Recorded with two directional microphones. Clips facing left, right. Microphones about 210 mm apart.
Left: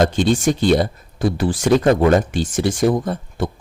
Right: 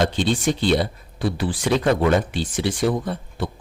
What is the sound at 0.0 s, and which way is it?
Speech, 45° left (ahead or behind).